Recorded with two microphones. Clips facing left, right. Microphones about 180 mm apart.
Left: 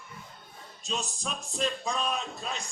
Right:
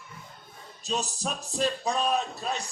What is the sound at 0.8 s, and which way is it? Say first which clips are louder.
A man's voice: right 4 dB; 40° right (ahead or behind).